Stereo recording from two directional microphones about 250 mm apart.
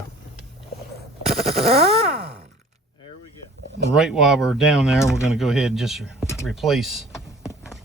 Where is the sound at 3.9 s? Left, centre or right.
Centre.